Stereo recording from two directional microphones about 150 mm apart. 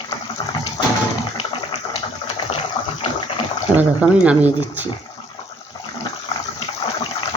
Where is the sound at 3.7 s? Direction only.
10° right (ahead or behind).